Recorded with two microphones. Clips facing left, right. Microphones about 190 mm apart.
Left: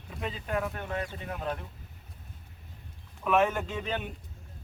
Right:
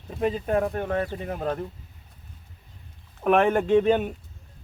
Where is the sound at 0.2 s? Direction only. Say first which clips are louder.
Right 9 dB; 45° right (ahead or behind).